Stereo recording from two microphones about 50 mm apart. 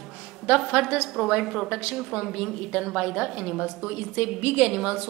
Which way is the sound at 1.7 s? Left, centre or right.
Right.